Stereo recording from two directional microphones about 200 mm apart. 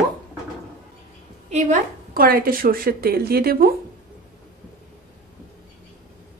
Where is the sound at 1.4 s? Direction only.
35° right (ahead or behind).